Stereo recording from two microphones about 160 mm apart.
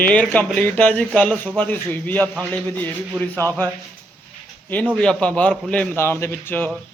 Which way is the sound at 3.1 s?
10° right (ahead or behind).